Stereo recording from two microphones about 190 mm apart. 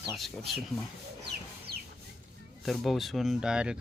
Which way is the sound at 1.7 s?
55° right (ahead or behind).